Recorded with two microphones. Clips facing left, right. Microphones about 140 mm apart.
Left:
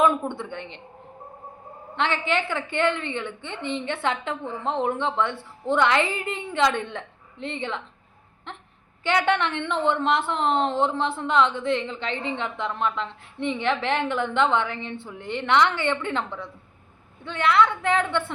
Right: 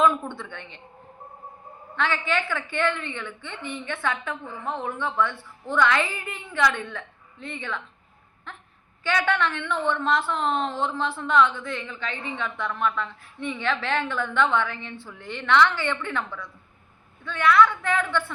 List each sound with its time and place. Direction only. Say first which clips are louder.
0.0 s a woman's voice: left 1 dB; 20° left (ahead or behind)
2.0 s a woman's voice: left 1 dB; 20° left (ahead or behind)
9.0 s a woman's voice: left 2 dB; 20° left (ahead or behind)